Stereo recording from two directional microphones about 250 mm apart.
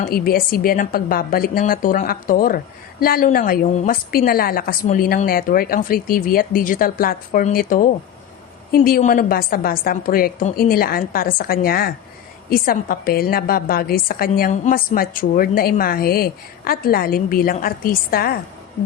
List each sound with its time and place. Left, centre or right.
0.0 s a woman's voice: left